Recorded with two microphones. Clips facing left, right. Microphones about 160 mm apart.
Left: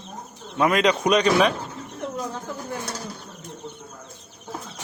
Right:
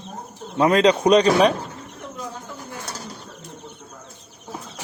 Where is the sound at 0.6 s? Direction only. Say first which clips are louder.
Right 4 dB; 30° right (ahead or behind).